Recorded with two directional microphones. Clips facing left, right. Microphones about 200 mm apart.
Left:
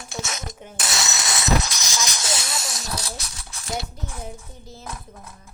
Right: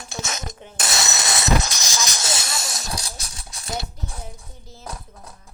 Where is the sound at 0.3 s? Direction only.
40° right (ahead or behind).